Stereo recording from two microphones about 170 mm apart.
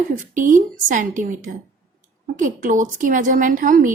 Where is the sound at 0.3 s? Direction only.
50° right (ahead or behind).